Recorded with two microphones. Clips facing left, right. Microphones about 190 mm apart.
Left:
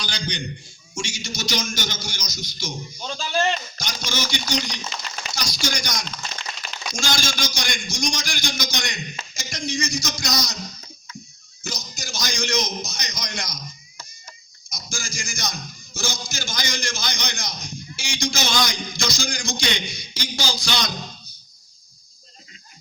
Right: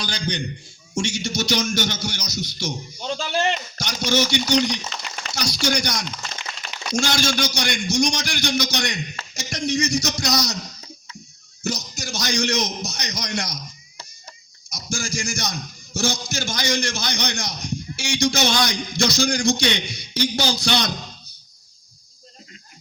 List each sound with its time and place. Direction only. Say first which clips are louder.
0.0 s a man's voice: right 3 dB; 55° right (ahead or behind)
11.6 s a man's voice: right 7 dB; 70° right (ahead or behind)
14.8 s a man's voice: right 7 dB; 65° right (ahead or behind)